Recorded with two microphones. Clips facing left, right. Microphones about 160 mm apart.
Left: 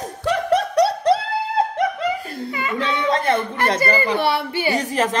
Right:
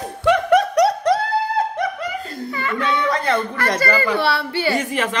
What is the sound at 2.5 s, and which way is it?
A child's voice, 15° left (ahead or behind).